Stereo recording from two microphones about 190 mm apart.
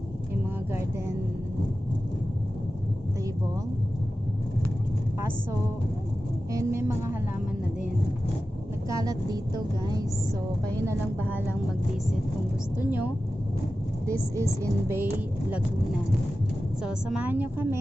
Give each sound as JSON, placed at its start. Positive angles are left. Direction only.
{"t": 0.7, "sound": "speech", "side_deg": -15}
{"t": 6.5, "sound": "speech", "side_deg": -15}
{"t": 8.9, "sound": "a woman's voice", "side_deg": -20}
{"t": 12.7, "sound": "speech", "side_deg": -10}
{"t": 14.1, "sound": "speech", "side_deg": -15}
{"t": 16.8, "sound": "speech", "side_deg": -5}